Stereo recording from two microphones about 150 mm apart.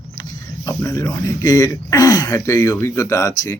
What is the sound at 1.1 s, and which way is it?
Speech, 20° left (ahead or behind).